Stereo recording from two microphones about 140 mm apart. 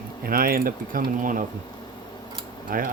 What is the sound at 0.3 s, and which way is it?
Speech, 90° right.